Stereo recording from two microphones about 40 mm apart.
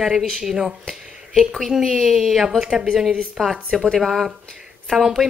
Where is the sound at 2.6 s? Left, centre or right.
Centre.